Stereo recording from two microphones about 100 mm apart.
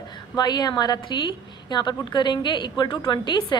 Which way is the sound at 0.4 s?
45° left (ahead or behind).